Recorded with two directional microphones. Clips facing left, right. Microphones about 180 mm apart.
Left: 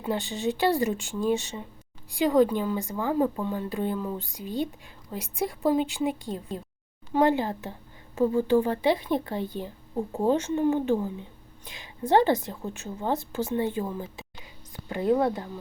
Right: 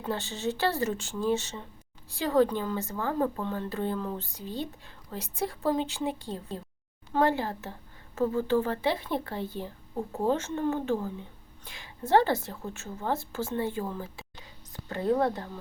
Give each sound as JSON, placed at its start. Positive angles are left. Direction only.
{"t": 0.0, "sound": "speech", "side_deg": 15}